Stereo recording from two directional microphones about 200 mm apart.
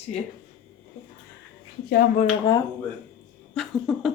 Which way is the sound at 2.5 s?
20° left (ahead or behind).